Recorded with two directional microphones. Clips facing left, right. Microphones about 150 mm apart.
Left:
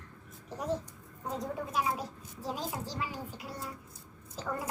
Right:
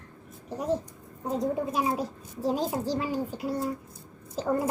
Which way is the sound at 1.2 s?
25° right (ahead or behind).